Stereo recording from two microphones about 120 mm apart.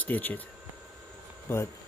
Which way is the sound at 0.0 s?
15° left (ahead or behind).